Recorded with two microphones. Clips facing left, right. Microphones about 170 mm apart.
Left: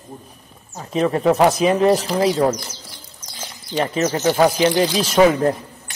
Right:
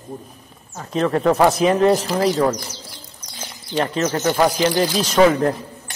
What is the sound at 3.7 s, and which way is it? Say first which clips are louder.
Speech: even; 5° left (ahead or behind).